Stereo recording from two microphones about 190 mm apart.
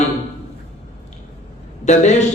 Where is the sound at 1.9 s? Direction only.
40° left (ahead or behind).